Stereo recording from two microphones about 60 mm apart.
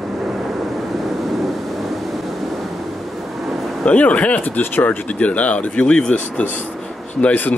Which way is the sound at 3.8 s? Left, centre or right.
Left.